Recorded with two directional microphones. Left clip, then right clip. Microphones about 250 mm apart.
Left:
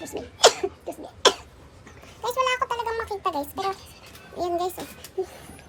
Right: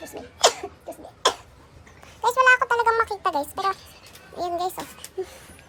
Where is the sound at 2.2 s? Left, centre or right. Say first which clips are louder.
Right 7 dB; centre.